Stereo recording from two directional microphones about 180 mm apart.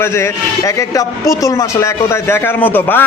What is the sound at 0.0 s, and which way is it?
A man's voice, 15° left (ahead or behind).